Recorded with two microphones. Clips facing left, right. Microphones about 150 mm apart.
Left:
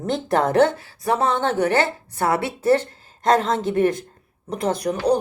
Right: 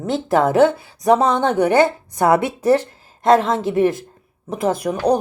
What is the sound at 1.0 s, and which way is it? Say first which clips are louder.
A woman's voice: right 5 dB; 20° right (ahead or behind).